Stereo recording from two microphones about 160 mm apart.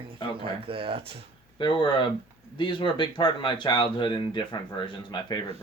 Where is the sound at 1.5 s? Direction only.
30° left (ahead or behind).